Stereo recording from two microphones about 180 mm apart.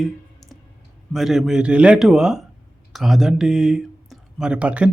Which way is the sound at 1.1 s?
Centre (ahead or behind).